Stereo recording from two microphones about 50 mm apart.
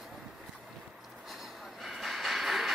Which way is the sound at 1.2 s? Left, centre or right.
Centre.